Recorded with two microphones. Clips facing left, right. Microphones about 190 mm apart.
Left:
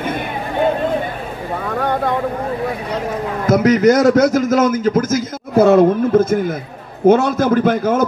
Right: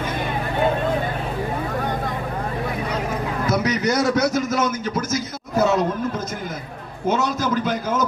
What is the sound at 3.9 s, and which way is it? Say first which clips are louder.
Speech: left 7 dB; 50° left (ahead or behind).